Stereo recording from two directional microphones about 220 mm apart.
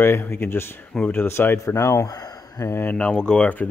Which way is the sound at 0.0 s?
10° left (ahead or behind).